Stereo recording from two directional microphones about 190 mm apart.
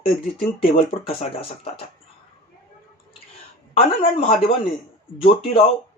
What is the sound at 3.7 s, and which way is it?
Speech, 30° left (ahead or behind).